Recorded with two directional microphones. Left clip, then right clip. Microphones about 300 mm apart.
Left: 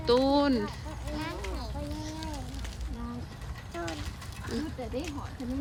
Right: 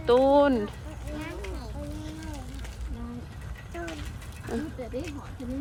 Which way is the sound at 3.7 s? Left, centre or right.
Centre.